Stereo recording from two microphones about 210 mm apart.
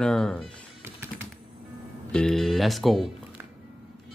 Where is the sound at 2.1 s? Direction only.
Centre (ahead or behind).